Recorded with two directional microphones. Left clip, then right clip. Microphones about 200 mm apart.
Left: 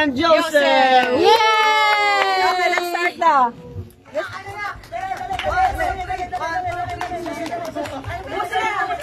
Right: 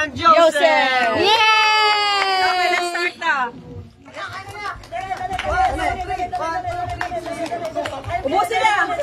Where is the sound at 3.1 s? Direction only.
30° left (ahead or behind).